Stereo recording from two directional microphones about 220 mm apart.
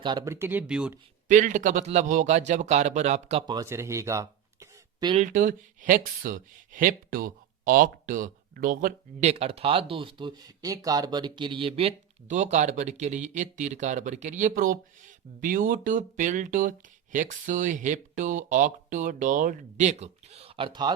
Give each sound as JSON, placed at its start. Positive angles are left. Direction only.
{"t": 0.0, "sound": "speech", "side_deg": -20}
{"t": 1.3, "sound": "speech", "side_deg": -35}
{"t": 3.4, "sound": "speech", "side_deg": -15}
{"t": 5.2, "sound": "speech", "side_deg": -40}